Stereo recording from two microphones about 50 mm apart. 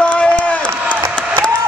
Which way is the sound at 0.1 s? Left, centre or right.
Left.